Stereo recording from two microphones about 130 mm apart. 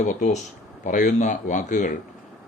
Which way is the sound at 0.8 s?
75° left (ahead or behind).